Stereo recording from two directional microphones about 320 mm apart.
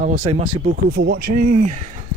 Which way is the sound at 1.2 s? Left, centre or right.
Right.